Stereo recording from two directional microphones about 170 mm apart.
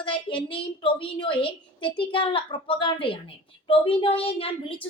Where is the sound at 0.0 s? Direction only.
30° left (ahead or behind).